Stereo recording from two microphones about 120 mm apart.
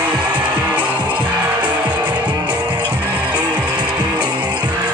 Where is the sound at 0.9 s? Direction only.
40° right (ahead or behind).